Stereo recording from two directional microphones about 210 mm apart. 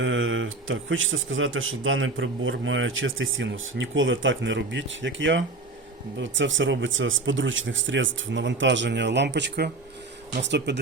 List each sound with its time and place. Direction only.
0.0 s speech: 60° right (ahead or behind)